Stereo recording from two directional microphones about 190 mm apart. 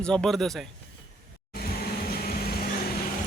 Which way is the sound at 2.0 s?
50° left (ahead or behind).